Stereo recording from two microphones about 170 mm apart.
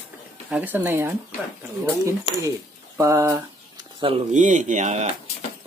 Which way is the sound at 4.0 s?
30° right (ahead or behind).